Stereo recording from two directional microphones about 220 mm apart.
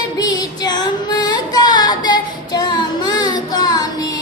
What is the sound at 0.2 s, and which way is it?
Music, 15° left (ahead or behind).